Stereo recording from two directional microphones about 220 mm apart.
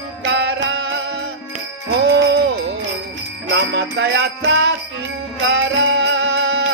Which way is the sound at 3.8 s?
55° right (ahead or behind).